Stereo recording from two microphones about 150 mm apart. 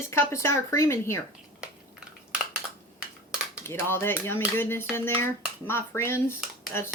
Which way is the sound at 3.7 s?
15° left (ahead or behind).